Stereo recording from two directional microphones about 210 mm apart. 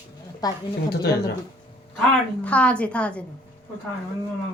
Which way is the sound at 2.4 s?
5° left (ahead or behind).